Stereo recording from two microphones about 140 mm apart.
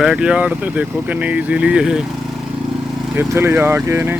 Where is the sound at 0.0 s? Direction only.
5° right (ahead or behind).